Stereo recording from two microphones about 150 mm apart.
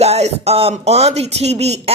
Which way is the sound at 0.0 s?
45° right (ahead or behind).